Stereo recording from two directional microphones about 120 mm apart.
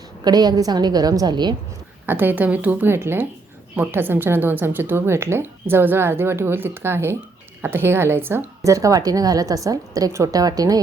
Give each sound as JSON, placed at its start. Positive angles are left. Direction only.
{"t": 0.3, "sound": "a woman's voice", "side_deg": -35}
{"t": 2.0, "sound": "a woman's voice", "side_deg": -15}